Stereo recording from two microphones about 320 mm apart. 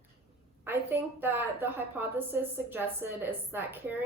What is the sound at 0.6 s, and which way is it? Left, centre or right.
A woman's voice, centre.